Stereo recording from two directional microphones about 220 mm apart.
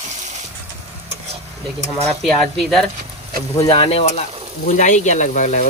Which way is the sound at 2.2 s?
Centre (ahead or behind).